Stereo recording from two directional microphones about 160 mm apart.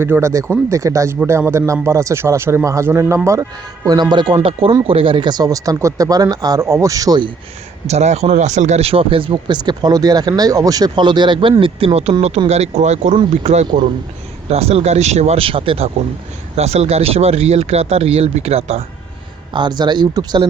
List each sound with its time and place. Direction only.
0.0 s a man's voice: 15° right (ahead or behind)
7.9 s speech: 45° right (ahead or behind)
19.5 s speech: 25° right (ahead or behind)